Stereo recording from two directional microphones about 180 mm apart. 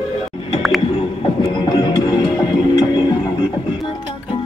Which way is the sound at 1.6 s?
25° left (ahead or behind).